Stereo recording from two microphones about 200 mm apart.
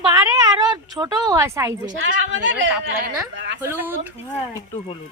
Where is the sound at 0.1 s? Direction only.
15° right (ahead or behind).